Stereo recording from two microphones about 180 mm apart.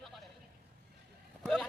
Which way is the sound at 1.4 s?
5° left (ahead or behind).